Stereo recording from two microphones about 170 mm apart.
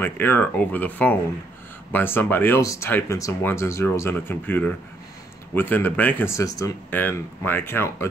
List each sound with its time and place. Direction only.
0.0 s speech: 10° left (ahead or behind)